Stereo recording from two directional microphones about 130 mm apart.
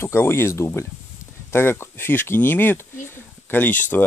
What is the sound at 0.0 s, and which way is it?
Speech, 20° left (ahead or behind).